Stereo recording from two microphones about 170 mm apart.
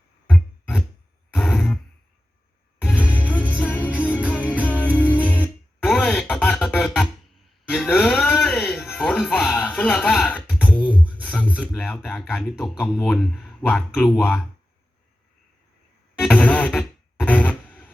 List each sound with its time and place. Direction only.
0.3 s a sound: 10° left (ahead or behind)
3.0 s music: 10° right (ahead or behind)
3.5 s music: 10° left (ahead or behind)
4.9 s music: 10° right (ahead or behind)
5.8 s a sound: 5° left (ahead or behind)
7.7 s music: 5° left (ahead or behind)
11.2 s speech: 10° left (ahead or behind)
16.1 s music: 5° left (ahead or behind)